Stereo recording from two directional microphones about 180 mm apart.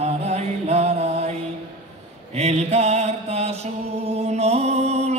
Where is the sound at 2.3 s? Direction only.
35° right (ahead or behind).